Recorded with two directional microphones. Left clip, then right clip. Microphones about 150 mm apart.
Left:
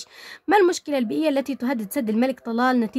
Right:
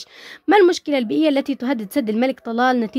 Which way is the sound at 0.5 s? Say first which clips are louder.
Right 4 dB; 25° right (ahead or behind).